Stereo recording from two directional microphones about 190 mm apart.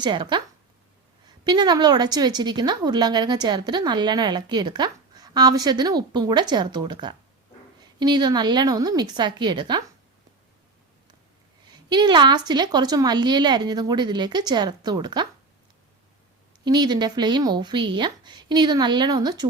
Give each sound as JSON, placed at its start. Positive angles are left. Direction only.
{"t": 0.0, "sound": "a woman's voice", "side_deg": -25}
{"t": 1.5, "sound": "a woman's voice", "side_deg": -20}
{"t": 11.7, "sound": "a woman's voice", "side_deg": -25}
{"t": 16.6, "sound": "a woman's voice", "side_deg": -20}